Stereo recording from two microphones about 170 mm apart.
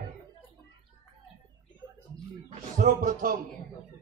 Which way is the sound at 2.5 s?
50° right (ahead or behind).